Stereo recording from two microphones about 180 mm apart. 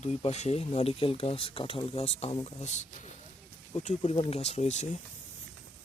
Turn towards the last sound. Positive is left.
turn(degrees=40)  # may be behind; listen again after turning